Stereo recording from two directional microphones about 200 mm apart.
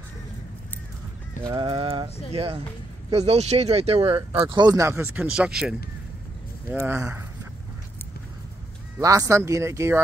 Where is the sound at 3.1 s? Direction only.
30° right (ahead or behind); by 7.3 s 15° right (ahead or behind).